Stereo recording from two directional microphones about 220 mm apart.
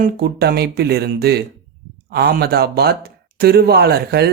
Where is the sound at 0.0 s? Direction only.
45° right (ahead or behind).